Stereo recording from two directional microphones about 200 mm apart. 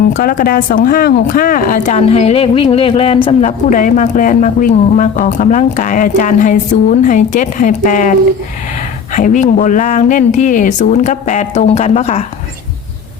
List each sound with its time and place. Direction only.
0.1 s speech: 45° left (ahead or behind); by 3.3 s 25° left (ahead or behind)
3.4 s speech: 40° left (ahead or behind)
9.1 s speech: 40° left (ahead or behind)